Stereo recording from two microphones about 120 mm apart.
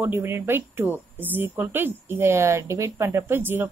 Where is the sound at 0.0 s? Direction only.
20° right (ahead or behind).